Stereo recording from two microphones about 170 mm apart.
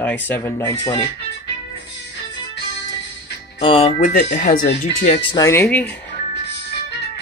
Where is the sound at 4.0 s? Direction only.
50° left (ahead or behind).